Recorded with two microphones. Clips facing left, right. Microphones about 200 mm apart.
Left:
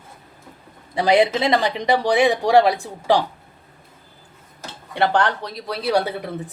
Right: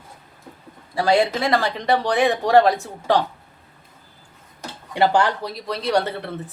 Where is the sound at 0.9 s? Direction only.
20° left (ahead or behind).